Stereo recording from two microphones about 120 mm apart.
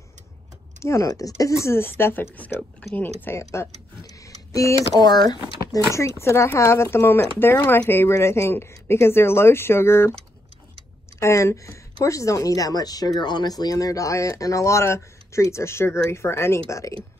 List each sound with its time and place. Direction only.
0.7 s a woman's voice: 25° left (ahead or behind)
5.9 s a woman's voice: 25° left (ahead or behind)
11.1 s a woman's voice: 25° left (ahead or behind)